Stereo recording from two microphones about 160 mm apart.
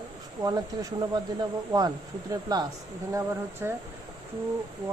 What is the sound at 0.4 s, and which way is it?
Speech, 20° right (ahead or behind).